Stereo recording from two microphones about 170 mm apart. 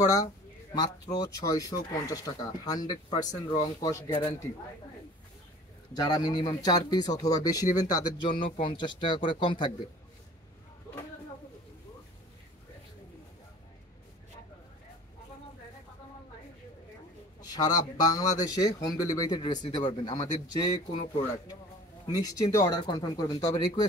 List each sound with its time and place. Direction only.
0.0 s speech: 20° left (ahead or behind)
6.0 s speech: 25° left (ahead or behind)
17.4 s speech: 20° left (ahead or behind)
22.0 s speech: 20° left (ahead or behind)